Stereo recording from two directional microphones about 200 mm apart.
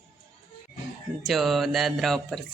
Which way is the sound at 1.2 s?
Centre (ahead or behind).